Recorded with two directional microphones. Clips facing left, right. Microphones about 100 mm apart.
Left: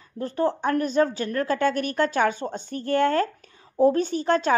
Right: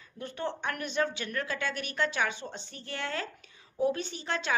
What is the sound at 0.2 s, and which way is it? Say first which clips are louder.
A woman's voice: left 10 dB; 40° left (ahead or behind).